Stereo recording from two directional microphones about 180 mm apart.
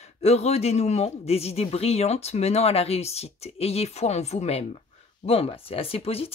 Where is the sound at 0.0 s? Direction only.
35° left (ahead or behind).